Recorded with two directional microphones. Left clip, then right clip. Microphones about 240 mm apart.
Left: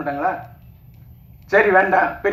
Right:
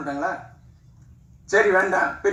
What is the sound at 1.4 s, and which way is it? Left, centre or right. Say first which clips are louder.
Speech: left 4 dB; right.